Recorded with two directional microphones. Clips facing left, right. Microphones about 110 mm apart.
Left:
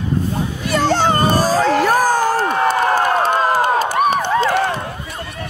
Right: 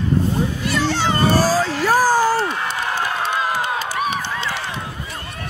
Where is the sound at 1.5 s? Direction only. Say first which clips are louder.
Left 3 dB; 55° left (ahead or behind).